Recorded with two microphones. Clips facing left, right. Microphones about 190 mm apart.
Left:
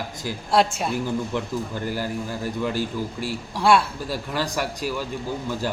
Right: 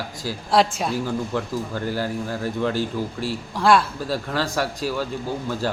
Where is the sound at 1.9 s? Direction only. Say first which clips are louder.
Right 3 dB; 10° left (ahead or behind).